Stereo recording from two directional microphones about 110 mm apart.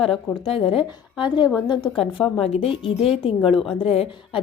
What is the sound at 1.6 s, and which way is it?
Speech, 45° left (ahead or behind).